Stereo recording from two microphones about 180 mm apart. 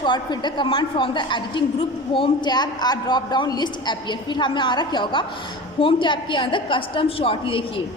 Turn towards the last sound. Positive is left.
turn(degrees=30)  # may be behind; listen again after turning